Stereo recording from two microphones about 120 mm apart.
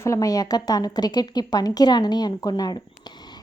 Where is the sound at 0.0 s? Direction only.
25° left (ahead or behind).